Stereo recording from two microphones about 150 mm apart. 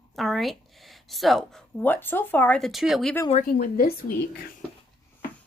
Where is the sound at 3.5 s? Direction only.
90° left.